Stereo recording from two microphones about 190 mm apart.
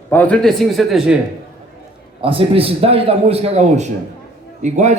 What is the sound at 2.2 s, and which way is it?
A man's voice, 30° right (ahead or behind).